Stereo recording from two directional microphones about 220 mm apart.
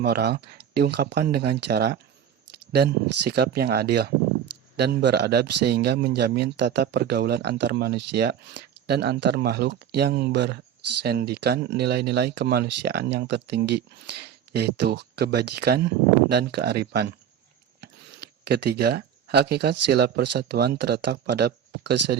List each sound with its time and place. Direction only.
0.0 s speech: 45° right (ahead or behind)